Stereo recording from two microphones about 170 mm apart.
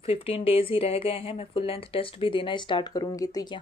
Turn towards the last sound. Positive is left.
turn(degrees=20)  # may be behind; listen again after turning